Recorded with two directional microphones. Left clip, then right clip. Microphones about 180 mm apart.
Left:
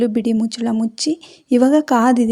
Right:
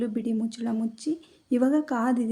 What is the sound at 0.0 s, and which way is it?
A woman's voice, 40° left (ahead or behind).